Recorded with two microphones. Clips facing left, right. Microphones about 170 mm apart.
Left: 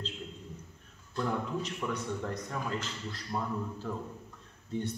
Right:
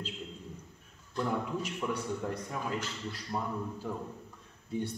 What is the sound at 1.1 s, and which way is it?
Speech, 10° right (ahead or behind).